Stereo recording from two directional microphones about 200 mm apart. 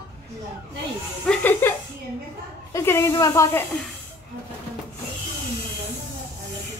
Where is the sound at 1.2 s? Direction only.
5° left (ahead or behind).